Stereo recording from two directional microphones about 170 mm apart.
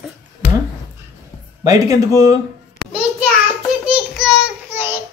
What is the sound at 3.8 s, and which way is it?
Speech, 5° right (ahead or behind).